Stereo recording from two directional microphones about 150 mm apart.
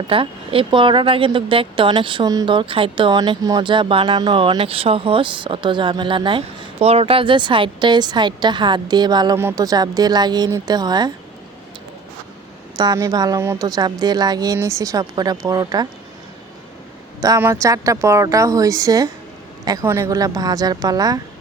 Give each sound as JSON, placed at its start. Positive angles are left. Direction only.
{"t": 0.1, "sound": "speech", "side_deg": -35}
{"t": 12.7, "sound": "speech", "side_deg": -25}
{"t": 17.2, "sound": "speech", "side_deg": -25}